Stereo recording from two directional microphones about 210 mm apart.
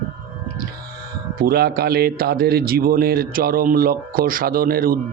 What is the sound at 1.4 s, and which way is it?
Speech, 45° right (ahead or behind).